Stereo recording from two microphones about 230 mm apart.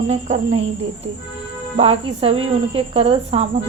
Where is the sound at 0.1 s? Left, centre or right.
Right.